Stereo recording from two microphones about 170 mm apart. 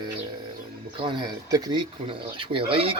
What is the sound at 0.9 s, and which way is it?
Speech, 30° right (ahead or behind).